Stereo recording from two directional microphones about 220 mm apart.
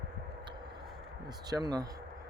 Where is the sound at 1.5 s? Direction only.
15° right (ahead or behind).